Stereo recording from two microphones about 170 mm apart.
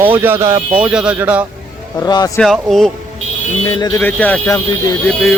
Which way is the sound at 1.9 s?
25° left (ahead or behind).